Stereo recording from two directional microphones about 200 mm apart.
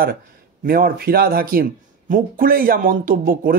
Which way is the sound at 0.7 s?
50° right (ahead or behind).